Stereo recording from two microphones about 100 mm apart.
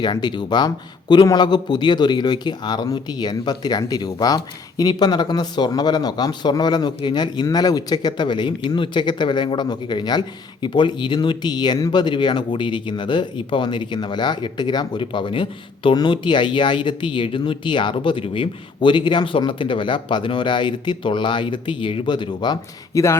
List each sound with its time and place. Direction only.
0.0 s a man's voice: 45° left (ahead or behind)
22.9 s speech: 30° left (ahead or behind)